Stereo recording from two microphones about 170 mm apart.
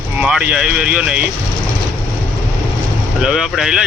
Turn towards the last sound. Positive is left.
turn(degrees=-5)  # may be behind; listen again after turning